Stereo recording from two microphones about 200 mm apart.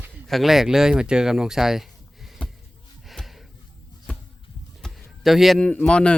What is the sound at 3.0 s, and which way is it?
Gasp, centre (ahead or behind).